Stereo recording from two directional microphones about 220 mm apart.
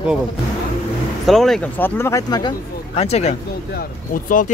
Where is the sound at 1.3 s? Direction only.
Centre (ahead or behind); by 3.3 s 30° left (ahead or behind).